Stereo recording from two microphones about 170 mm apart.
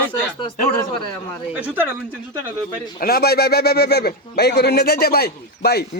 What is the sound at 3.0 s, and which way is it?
Speech, 65° left (ahead or behind).